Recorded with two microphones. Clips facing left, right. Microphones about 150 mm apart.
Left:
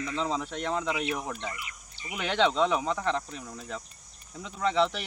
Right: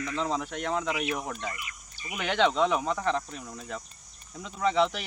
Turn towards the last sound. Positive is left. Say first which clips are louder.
# right 1 dB
turn(degrees=-5)  # may be behind; listen again after turning